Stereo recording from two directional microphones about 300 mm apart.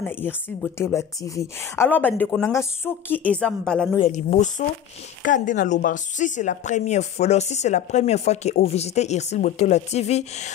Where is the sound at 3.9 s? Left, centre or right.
Left.